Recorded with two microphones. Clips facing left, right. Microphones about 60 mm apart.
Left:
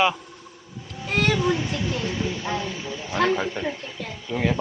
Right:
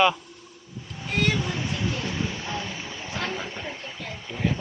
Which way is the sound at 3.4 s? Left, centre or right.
Left.